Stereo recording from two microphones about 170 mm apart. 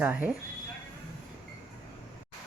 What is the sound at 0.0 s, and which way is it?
Speech, 10° right (ahead or behind).